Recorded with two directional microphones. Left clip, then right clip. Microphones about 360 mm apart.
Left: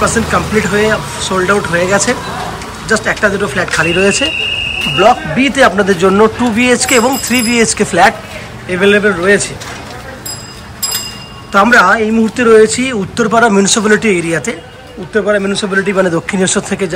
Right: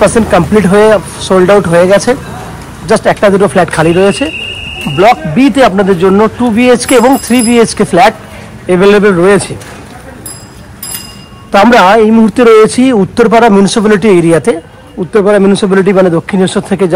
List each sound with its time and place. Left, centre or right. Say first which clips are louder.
0.1 s a man's voice: right 5 dB; centre
5.4 s a man's voice: right 3 dB; centre
11.5 s a man's voice: right 4 dB; centre